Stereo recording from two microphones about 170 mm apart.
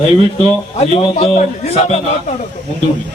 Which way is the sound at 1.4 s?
40° left (ahead or behind).